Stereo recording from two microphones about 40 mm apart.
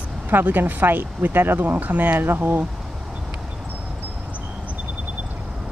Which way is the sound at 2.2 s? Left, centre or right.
Right.